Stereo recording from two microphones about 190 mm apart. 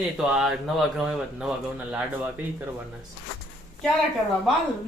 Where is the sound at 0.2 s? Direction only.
5° right (ahead or behind).